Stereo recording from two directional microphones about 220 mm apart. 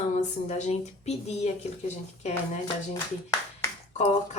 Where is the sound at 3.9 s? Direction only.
30° left (ahead or behind).